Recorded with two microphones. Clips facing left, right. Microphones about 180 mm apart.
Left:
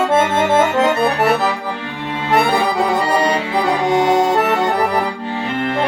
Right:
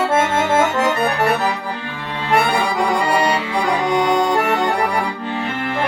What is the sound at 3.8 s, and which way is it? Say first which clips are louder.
Accordion: left 3 dB; 25° left (ahead or behind).